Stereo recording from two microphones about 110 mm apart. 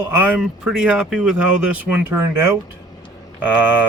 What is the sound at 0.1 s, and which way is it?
Speech, 15° right (ahead or behind).